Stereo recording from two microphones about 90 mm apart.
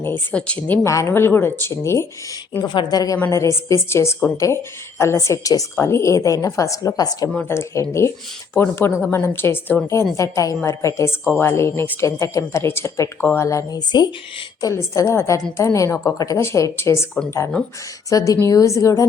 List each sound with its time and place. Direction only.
0.0 s speech: 20° left (ahead or behind)
0.9 s speech: 35° left (ahead or behind)
2.6 s a woman's voice: 50° left (ahead or behind)
5.7 s speech: 30° left (ahead or behind); by 7.3 s 45° left (ahead or behind)
7.4 s speech: 30° left (ahead or behind); by 14.1 s 50° left (ahead or behind)
14.6 s speech: 35° left (ahead or behind)
18.1 s speech: 40° left (ahead or behind)